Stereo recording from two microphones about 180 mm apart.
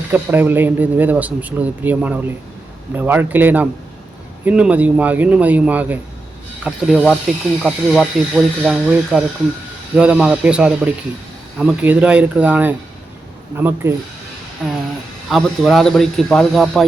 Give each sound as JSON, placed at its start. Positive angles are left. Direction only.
{"t": 0.1, "sound": "speech", "side_deg": -10}
{"t": 15.3, "sound": "speech", "side_deg": 0}